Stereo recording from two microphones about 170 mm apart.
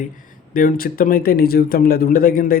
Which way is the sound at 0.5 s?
55° left (ahead or behind).